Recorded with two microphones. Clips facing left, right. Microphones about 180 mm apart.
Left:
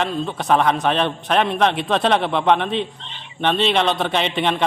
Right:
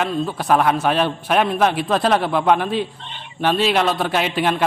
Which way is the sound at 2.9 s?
50° right (ahead or behind).